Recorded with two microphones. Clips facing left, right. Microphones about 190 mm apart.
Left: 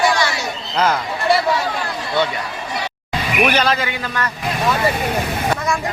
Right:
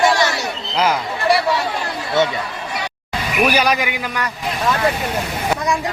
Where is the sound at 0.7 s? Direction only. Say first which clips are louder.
Even; 10° right (ahead or behind).